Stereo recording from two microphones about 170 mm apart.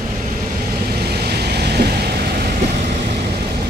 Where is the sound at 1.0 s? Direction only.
70° right (ahead or behind).